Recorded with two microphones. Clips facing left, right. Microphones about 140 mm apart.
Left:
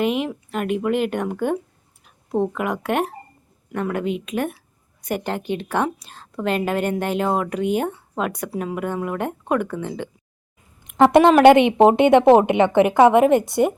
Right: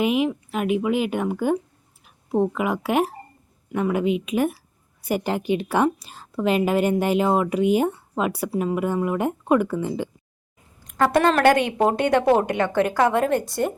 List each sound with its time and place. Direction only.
0.0 s a woman's voice: 5° right (ahead or behind)
10.8 s a woman's voice: 20° left (ahead or behind)